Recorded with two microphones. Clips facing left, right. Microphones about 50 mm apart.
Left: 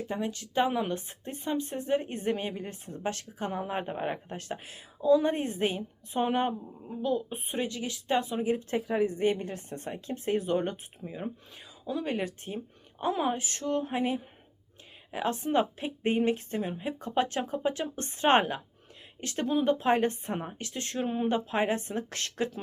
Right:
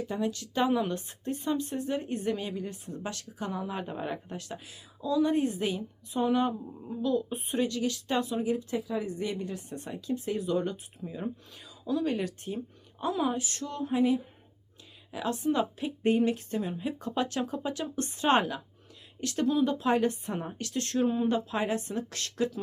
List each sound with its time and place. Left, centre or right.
0.1 s speech: left
7.0 s speech: left
8.8 s speech: left
9.0 s speech: left
11.0 s speech: left